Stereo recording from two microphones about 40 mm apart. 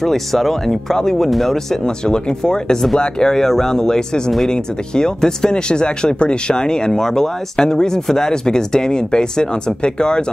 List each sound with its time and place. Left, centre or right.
0.0 s speech: centre; by 10.2 s left